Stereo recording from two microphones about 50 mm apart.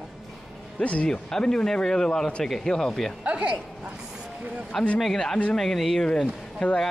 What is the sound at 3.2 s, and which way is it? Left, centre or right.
Speech, right.